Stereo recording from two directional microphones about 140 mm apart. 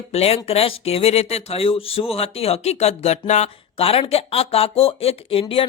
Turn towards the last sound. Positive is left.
turn(degrees=40)  # may be behind; listen again after turning